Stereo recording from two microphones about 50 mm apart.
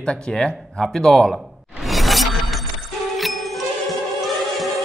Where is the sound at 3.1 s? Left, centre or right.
Centre.